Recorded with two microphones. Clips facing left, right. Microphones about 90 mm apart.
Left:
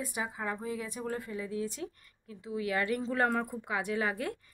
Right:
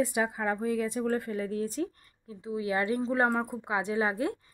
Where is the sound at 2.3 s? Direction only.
25° right (ahead or behind).